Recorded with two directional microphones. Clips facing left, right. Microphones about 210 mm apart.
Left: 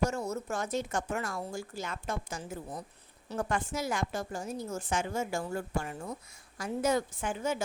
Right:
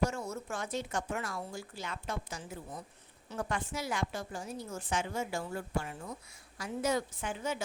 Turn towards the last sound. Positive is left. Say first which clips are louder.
# left 4 dB
turn(degrees=45)  # may be behind; listen again after turning